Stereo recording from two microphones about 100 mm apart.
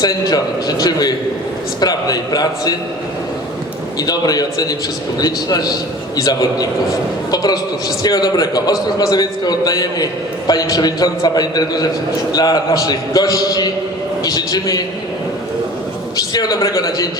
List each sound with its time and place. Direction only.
0.0 s a man's voice: 40° left (ahead or behind)
4.0 s a man's voice: 40° left (ahead or behind)
16.1 s a man's voice: 40° left (ahead or behind)